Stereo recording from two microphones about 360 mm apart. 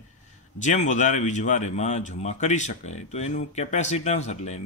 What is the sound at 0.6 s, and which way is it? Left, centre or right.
Speech, centre.